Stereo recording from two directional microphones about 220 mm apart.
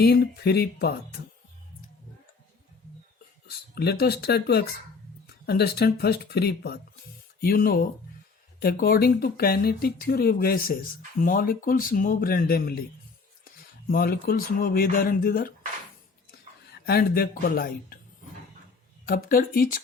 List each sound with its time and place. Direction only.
0.0 s speech: 50° left (ahead or behind)
3.4 s speech: 45° left (ahead or behind)
16.7 s speech: 45° left (ahead or behind)
19.0 s speech: 40° left (ahead or behind)